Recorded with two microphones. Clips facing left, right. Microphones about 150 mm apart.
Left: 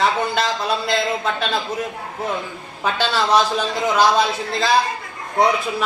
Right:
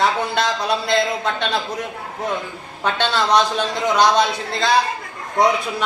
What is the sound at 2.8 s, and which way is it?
A man's voice, 5° left (ahead or behind).